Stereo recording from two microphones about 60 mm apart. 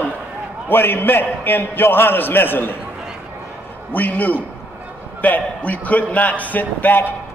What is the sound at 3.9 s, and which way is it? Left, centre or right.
A man's voice, left.